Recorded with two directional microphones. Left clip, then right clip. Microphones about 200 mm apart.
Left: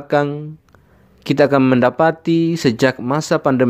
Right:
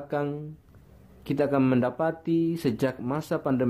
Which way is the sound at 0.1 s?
35° left (ahead or behind).